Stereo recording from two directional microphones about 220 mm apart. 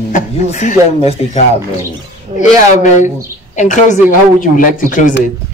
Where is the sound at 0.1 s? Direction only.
35° left (ahead or behind).